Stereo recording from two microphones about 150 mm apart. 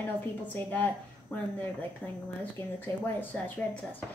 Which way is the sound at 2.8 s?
10° left (ahead or behind).